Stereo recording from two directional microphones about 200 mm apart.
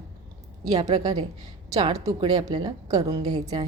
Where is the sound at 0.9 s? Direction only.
20° right (ahead or behind).